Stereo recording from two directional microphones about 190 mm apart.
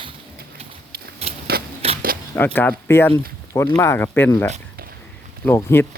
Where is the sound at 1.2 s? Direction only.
30° right (ahead or behind).